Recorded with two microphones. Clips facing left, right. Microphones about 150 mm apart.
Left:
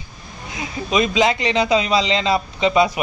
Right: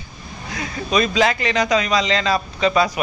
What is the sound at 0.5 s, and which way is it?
A man's voice, 20° left (ahead or behind).